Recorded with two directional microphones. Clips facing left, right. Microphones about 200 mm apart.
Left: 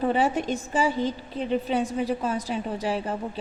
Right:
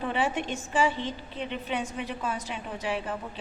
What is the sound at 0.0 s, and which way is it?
A woman's voice, 40° left (ahead or behind).